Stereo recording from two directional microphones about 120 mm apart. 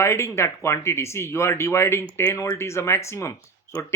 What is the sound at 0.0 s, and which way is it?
Speech, 25° left (ahead or behind).